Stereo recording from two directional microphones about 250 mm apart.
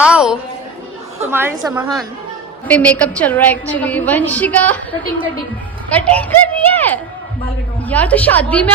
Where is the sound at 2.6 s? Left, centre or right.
Centre.